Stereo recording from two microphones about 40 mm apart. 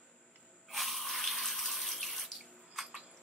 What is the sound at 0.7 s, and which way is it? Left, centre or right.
Water tap, centre.